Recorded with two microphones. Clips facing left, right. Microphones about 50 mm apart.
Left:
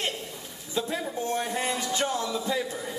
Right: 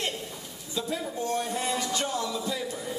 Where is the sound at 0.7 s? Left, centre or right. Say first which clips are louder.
Left 2 dB; left.